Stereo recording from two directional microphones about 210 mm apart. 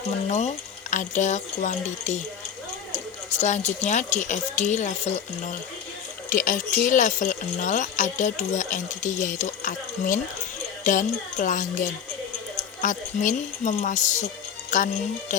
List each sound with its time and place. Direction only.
0.3 s speech: 35° left (ahead or behind)
12.8 s speech: 35° left (ahead or behind)